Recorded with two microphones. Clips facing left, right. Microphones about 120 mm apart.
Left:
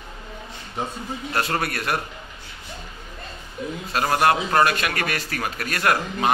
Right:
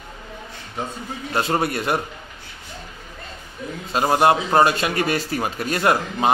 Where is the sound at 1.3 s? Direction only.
25° right (ahead or behind).